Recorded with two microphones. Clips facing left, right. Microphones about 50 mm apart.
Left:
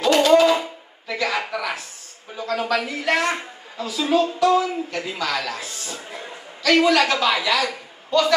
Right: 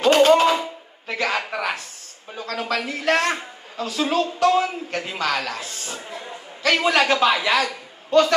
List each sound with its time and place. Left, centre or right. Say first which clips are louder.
0.0 s a sound: even; right
2.3 s a man's voice: left 3 dB; right
6.6 s a man's voice: left 2 dB; right
8.1 s a man's voice: right 2 dB; right